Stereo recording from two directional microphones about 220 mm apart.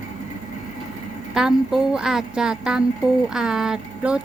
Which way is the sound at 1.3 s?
Centre (ahead or behind).